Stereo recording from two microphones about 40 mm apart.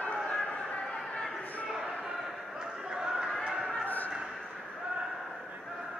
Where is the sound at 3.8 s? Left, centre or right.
Left.